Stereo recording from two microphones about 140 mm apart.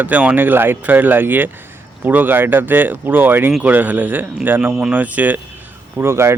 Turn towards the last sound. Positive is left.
turn(degrees=-20)  # may be behind; listen again after turning